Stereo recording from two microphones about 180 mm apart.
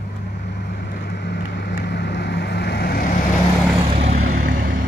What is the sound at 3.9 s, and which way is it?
Vehicle, 35° right (ahead or behind).